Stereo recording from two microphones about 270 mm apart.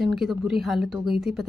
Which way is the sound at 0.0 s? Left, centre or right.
Centre.